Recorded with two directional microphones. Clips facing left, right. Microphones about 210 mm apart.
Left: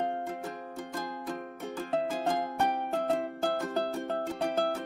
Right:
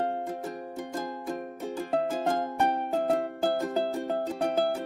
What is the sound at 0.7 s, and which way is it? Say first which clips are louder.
Music: right 3 dB; 25° right (ahead or behind).